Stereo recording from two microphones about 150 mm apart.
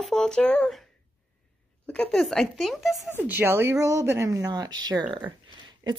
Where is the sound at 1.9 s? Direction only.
Centre (ahead or behind).